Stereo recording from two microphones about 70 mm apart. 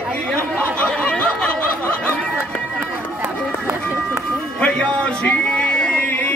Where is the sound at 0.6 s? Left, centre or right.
Centre.